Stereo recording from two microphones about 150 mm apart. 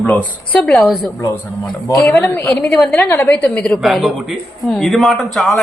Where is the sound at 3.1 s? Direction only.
15° left (ahead or behind).